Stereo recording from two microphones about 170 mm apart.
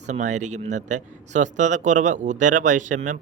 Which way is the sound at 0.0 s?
45° right (ahead or behind).